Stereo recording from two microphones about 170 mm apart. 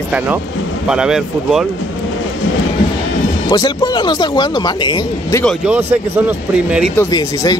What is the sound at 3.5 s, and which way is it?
Speech, 25° left (ahead or behind).